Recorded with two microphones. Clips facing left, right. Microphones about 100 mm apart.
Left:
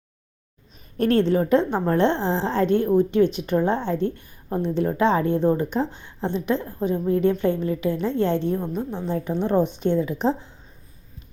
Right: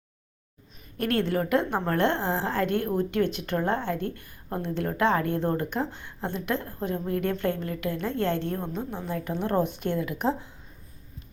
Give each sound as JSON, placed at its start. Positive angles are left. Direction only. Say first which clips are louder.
{"t": 0.9, "sound": "a woman's voice", "louder": "left 7 dB", "side_deg": 30}
{"t": 9.0, "sound": "a woman's voice", "louder": "left 6 dB", "side_deg": 20}